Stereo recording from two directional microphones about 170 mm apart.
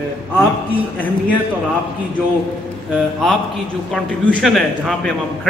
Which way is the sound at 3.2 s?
Centre (ahead or behind).